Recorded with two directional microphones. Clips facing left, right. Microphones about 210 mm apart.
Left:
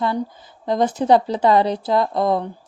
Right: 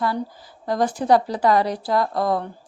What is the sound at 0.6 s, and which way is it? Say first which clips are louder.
Speech: left 3 dB; 20° left (ahead or behind).